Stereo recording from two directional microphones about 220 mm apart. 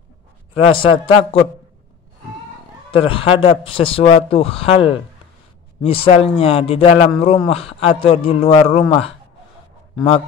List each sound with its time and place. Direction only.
0.6 s a man's voice: 25° left (ahead or behind)
2.9 s a man's voice: 25° left (ahead or behind)